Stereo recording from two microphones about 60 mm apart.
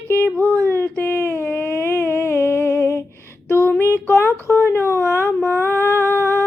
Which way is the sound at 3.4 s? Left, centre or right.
Left.